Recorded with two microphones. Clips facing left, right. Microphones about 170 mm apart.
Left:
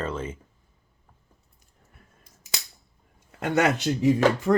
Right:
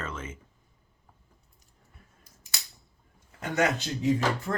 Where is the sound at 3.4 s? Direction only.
75° left (ahead or behind).